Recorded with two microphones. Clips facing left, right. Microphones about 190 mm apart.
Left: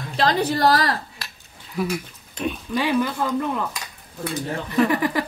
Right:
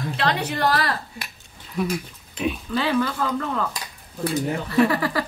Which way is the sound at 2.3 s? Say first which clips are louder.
Right 1 dB; 5° right (ahead or behind).